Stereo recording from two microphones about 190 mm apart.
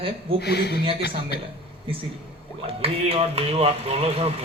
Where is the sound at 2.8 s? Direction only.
30° right (ahead or behind).